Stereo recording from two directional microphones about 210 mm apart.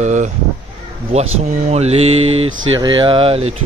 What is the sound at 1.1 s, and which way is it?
Mantra, 30° right (ahead or behind).